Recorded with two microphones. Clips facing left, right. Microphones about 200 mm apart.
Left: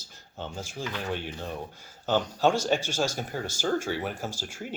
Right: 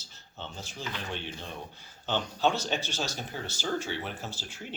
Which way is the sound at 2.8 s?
10° left (ahead or behind).